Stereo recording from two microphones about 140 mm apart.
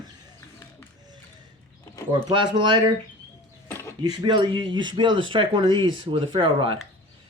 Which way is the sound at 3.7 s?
15° left (ahead or behind).